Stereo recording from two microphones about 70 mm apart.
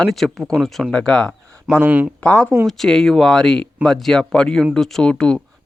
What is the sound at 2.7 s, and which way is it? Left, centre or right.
Speech, centre.